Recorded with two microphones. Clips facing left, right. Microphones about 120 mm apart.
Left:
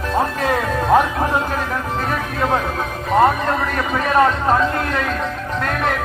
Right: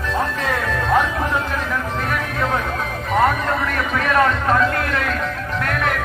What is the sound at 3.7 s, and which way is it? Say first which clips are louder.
Speech: left 2 dB; 30° left (ahead or behind).